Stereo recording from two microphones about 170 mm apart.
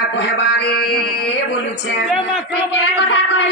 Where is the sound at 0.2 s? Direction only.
90° left; by 1.0 s 75° left (ahead or behind).